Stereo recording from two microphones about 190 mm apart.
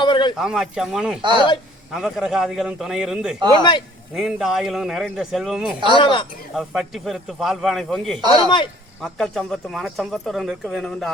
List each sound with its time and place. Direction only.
0.0 s a sound: 25° left (ahead or behind)
0.3 s speech: 5° right (ahead or behind)
1.2 s speech: 25° right (ahead or behind)
1.9 s speech: centre (ahead or behind)
3.6 s speech: 25° left (ahead or behind)
4.1 s speech: centre (ahead or behind)
5.9 s speech: 25° left (ahead or behind)
6.5 s speech: centre (ahead or behind)
8.3 s speech: 25° left (ahead or behind)
9.0 s speech: centre (ahead or behind)